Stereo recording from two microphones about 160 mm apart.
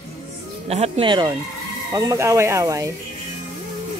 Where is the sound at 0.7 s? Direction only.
35° right (ahead or behind); by 2.9 s 20° right (ahead or behind).